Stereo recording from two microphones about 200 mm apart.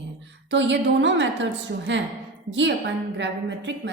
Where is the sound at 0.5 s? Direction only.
65° right (ahead or behind).